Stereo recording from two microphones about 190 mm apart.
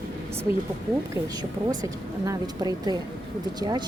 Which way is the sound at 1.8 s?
20° right (ahead or behind).